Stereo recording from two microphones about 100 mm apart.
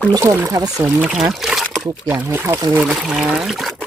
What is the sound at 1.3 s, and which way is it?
Trickle, centre (ahead or behind).